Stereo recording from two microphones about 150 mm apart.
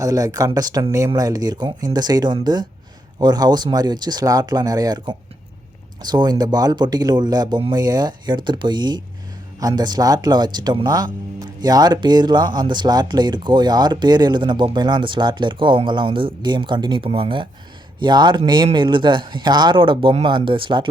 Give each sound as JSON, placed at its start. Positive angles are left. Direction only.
{"t": 0.0, "sound": "speech", "side_deg": -25}